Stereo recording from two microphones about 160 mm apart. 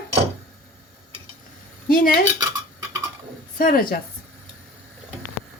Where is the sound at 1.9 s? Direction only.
60° left (ahead or behind).